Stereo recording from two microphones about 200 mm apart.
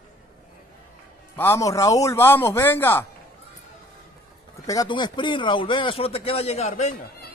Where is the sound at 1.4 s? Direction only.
15° left (ahead or behind).